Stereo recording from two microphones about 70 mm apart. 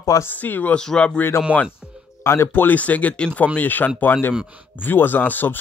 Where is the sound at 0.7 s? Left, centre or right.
Centre.